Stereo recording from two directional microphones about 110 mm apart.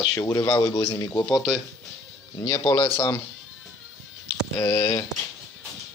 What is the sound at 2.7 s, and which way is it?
Speech, 40° left (ahead or behind).